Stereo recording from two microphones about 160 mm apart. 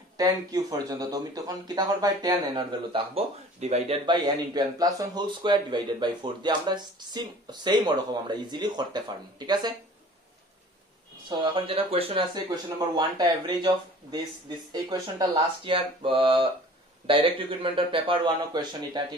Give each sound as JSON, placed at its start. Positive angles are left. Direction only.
{"t": 0.2, "sound": "a man's voice", "side_deg": -25}
{"t": 4.0, "sound": "a man's voice", "side_deg": -30}
{"t": 11.2, "sound": "a man's voice", "side_deg": -30}
{"t": 14.7, "sound": "speech", "side_deg": -25}